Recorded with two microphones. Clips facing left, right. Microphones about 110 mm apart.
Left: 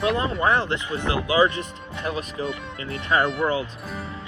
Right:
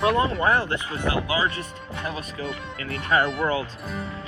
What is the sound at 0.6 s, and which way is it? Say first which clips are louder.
Speech: left 1 dB; 25° left (ahead or behind).